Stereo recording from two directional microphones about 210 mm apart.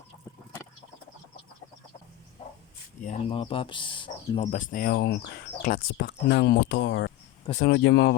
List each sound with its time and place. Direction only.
3.0 s speech: 30° left (ahead or behind)
4.5 s speech: 40° left (ahead or behind); by 7.1 s 55° left (ahead or behind)
7.5 s speech: 45° left (ahead or behind)